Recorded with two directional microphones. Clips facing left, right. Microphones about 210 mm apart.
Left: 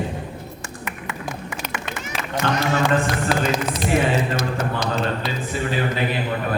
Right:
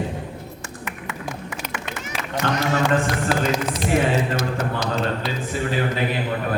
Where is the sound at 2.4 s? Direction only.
45° right (ahead or behind).